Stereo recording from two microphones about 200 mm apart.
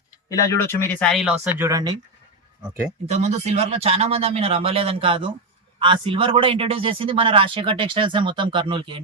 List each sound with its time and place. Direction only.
0.3 s speech: 15° left (ahead or behind); by 1.4 s centre (ahead or behind)
1.5 s speech: 15° right (ahead or behind)
3.1 s a man's voice: 35° right (ahead or behind)